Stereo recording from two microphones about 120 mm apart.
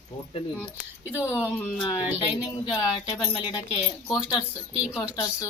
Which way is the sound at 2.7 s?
35° left (ahead or behind).